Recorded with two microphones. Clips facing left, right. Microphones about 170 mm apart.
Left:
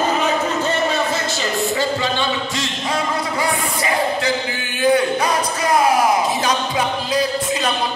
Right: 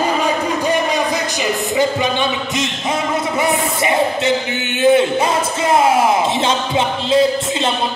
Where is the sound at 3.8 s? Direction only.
25° right (ahead or behind).